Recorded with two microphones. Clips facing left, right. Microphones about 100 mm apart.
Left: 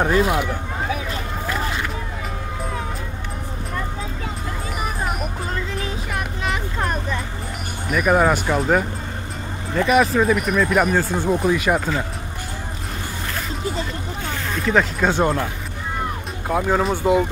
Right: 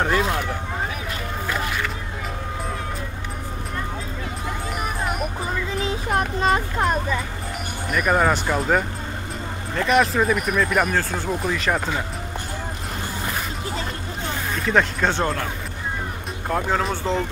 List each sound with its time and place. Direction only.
0.0 s speech: 10° left (ahead or behind)
4.8 s vehicle: centre (ahead or behind)
6.0 s a sound: 35° right (ahead or behind)
6.8 s vehicle: 5° right (ahead or behind)
7.9 s speech: 5° left (ahead or behind)
11.0 s speech: 15° left (ahead or behind)
14.5 s speech: centre (ahead or behind)
16.4 s speech: 5° left (ahead or behind)